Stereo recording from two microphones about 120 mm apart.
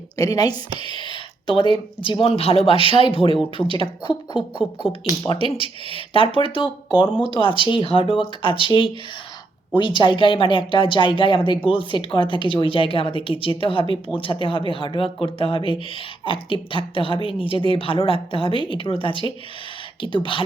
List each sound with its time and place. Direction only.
0.2 s speech: 35° left (ahead or behind)
2.2 s speech: 55° left (ahead or behind)